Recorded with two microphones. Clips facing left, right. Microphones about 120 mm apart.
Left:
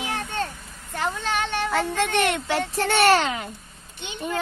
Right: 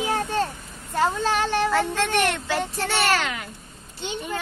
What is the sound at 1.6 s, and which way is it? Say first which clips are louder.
Speech: right 1 dB; 15° left (ahead or behind).